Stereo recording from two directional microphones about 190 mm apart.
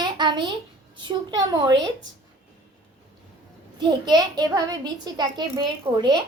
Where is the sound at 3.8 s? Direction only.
20° right (ahead or behind).